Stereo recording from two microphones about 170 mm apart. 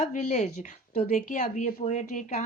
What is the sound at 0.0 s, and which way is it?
A woman's voice, 40° left (ahead or behind).